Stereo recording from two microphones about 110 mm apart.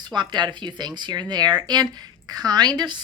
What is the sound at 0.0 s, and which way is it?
Speech, 45° right (ahead or behind).